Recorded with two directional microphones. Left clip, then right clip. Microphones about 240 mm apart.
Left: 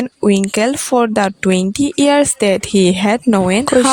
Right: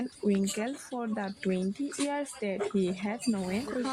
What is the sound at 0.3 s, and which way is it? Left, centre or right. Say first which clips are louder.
Speech: left 17 dB; left.